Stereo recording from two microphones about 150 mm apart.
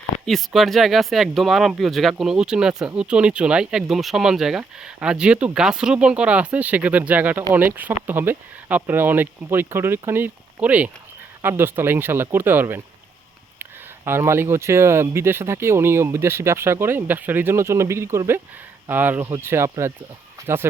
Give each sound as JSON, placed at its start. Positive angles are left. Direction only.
{"t": 0.3, "sound": "speech", "side_deg": 0}